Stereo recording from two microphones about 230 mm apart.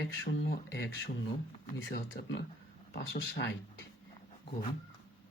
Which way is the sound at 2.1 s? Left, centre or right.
Left.